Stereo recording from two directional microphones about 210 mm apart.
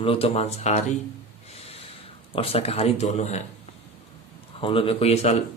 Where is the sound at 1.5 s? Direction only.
30° left (ahead or behind).